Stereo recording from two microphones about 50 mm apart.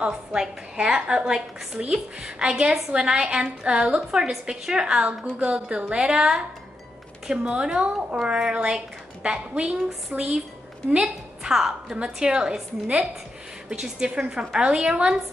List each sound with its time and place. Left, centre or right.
0.0 s a woman's voice: centre
10.1 s speech: right
10.9 s a woman's voice: centre
13.7 s a woman's voice: centre